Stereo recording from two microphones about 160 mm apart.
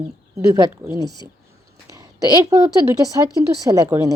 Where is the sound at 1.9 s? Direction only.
20° right (ahead or behind).